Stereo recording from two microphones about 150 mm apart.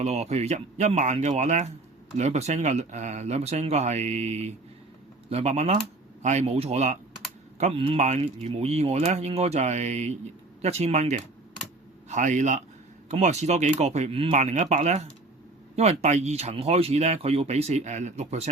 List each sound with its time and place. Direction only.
0.0 s speech: 45° right (ahead or behind)
14.3 s speech: 50° right (ahead or behind)